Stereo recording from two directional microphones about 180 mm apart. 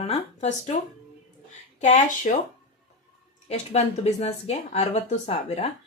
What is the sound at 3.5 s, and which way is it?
A woman's voice, 40° left (ahead or behind).